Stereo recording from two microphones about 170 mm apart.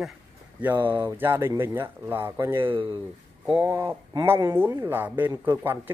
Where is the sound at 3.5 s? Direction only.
15° right (ahead or behind).